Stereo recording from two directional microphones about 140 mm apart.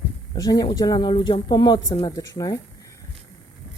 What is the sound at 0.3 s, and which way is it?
Speech, 25° left (ahead or behind).